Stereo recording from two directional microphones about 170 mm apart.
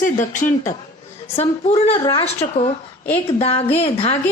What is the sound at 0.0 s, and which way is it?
Speech, 50° left (ahead or behind).